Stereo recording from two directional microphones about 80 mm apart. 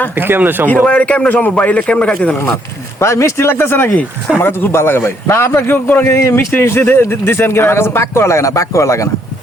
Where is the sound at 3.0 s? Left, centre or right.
Left.